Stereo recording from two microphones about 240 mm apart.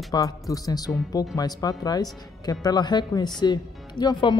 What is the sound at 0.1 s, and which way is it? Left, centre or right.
A woman's voice, centre.